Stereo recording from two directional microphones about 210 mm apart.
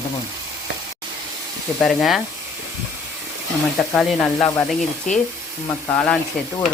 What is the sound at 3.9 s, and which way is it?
Stir, centre (ahead or behind).